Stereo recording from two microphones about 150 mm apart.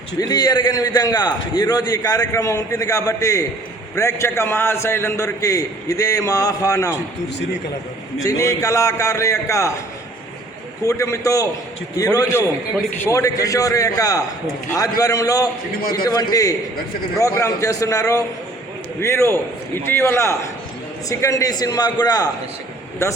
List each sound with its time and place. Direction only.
0.2 s a man's voice: 25° left (ahead or behind)
8.2 s a man's voice: 20° left (ahead or behind)
10.8 s a man's voice: 20° left (ahead or behind)
15.8 s a man's voice: 80° left
16.0 s a man's voice: 25° left (ahead or behind)